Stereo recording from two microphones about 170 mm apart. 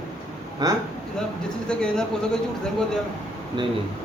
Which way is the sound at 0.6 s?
25° right (ahead or behind).